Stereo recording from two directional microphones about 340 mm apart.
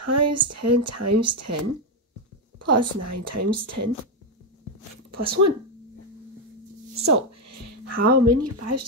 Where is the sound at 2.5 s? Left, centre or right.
Right.